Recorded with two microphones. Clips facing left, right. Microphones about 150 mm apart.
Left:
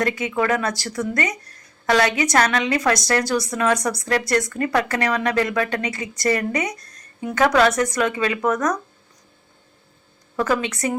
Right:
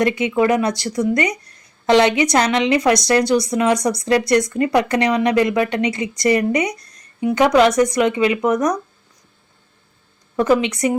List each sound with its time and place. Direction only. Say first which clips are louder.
0.0 s a woman's voice: right 5 dB; 20° right (ahead or behind)
10.3 s a woman's voice: right 6 dB; 15° right (ahead or behind)